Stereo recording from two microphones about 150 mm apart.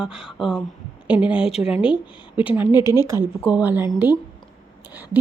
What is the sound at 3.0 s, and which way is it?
Speech, 15° right (ahead or behind).